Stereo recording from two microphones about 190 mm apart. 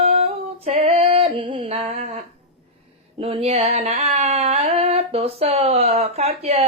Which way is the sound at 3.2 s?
30° right (ahead or behind).